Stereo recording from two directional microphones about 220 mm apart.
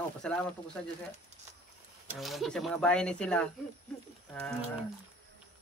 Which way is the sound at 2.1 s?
Centre (ahead or behind).